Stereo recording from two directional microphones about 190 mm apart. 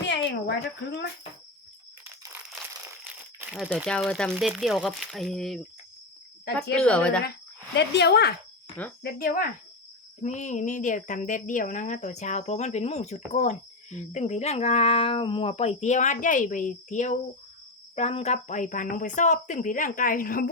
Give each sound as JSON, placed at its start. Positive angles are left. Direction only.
{"t": 0.0, "sound": "cricket", "side_deg": 65}
{"t": 2.8, "sound": "a sound", "side_deg": -10}
{"t": 3.5, "sound": "speech", "side_deg": -5}
{"t": 6.7, "sound": "speech", "side_deg": 5}
{"t": 7.8, "sound": "speech", "side_deg": 60}
{"t": 9.0, "sound": "speech", "side_deg": 50}
{"t": 10.2, "sound": "speech", "side_deg": 40}